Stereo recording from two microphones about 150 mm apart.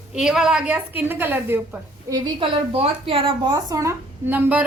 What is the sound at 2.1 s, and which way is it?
A woman's voice, 25° right (ahead or behind).